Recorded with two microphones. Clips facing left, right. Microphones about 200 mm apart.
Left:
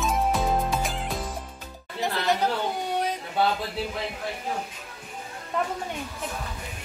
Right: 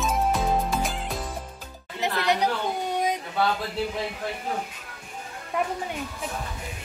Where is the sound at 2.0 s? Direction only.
20° right (ahead or behind).